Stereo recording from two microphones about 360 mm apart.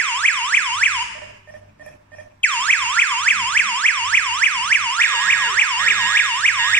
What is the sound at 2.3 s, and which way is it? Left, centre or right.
Car alarm, centre.